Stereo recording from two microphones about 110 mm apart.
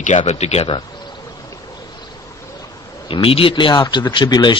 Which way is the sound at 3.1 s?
55° left (ahead or behind).